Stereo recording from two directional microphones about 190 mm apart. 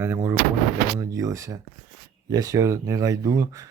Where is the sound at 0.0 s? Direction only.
10° right (ahead or behind).